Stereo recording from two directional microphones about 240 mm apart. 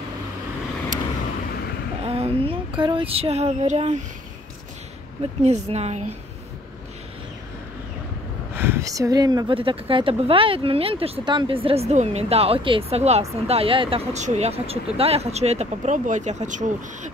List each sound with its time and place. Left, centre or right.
2.0 s child singing: right
5.7 s speech: right
8.5 s speech: centre; by 17.1 s right